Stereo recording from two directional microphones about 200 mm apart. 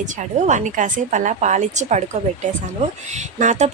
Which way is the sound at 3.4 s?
35° right (ahead or behind).